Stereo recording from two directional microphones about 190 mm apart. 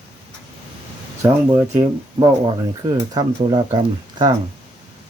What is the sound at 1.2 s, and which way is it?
Speech, 20° right (ahead or behind).